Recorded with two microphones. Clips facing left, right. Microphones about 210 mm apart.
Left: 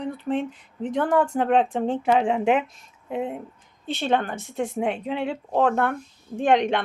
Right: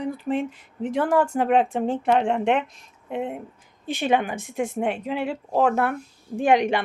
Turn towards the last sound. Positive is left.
turn(degrees=-5)  # may be behind; listen again after turning